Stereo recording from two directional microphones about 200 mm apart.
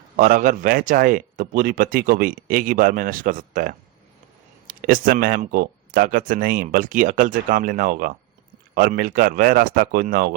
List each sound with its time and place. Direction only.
0.2 s a man's voice: 45° right (ahead or behind)